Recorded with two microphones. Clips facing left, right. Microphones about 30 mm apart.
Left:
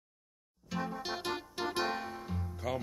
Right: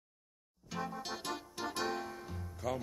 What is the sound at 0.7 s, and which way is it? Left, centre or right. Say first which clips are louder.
Music: left 3 dB; centre.